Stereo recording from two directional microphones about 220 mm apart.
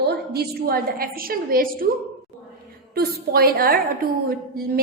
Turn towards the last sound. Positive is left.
turn(degrees=-45)  # may be behind; listen again after turning